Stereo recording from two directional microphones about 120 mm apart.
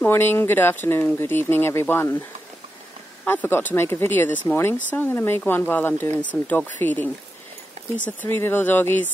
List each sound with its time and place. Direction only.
0.0 s speech: 20° left (ahead or behind)
3.3 s speech: 20° left (ahead or behind)
8.2 s speech: 15° left (ahead or behind)